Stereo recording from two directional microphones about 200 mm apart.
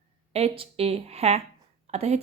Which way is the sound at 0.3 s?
30° right (ahead or behind).